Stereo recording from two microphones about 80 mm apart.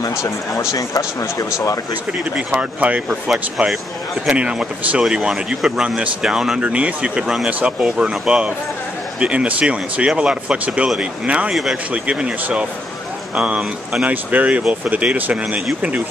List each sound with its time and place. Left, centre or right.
0.0 s speech: left
2.3 s speech: centre